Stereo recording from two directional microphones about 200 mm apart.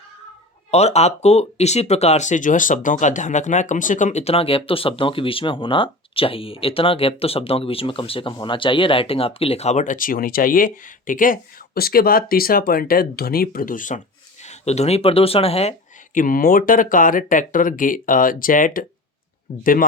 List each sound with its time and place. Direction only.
0.7 s speech: 35° left (ahead or behind)
16.1 s speech: 45° left (ahead or behind)